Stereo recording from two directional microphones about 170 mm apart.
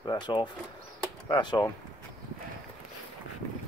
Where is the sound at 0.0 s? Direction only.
25° left (ahead or behind).